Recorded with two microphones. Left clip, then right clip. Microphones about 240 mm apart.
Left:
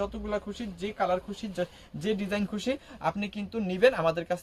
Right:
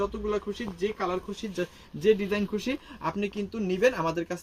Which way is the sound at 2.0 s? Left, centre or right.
Centre.